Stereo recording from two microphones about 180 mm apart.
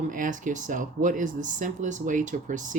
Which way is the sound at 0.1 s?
45° right (ahead or behind).